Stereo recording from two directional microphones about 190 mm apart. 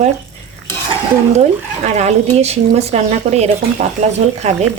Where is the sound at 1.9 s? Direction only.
35° right (ahead or behind).